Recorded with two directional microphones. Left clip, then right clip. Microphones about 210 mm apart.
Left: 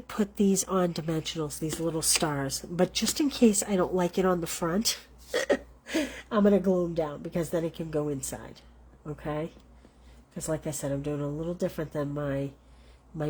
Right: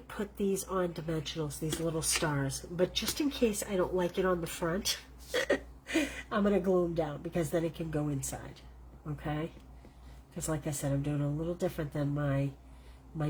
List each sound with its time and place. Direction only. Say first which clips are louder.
0.2 s speech: left 6 dB; 50° left (ahead or behind)
9.2 s speech: left 4 dB; 45° left (ahead or behind)